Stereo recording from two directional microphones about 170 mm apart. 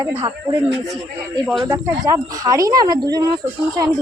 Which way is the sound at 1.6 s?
15° right (ahead or behind).